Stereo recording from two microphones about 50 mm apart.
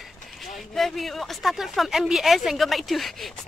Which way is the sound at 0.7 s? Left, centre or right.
Centre.